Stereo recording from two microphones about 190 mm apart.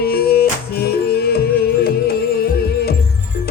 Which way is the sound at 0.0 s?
55° left (ahead or behind).